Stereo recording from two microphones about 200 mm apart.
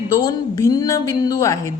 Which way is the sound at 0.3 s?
20° left (ahead or behind).